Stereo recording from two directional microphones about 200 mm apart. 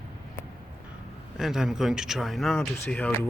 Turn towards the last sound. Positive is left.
turn(degrees=10)  # may be behind; listen again after turning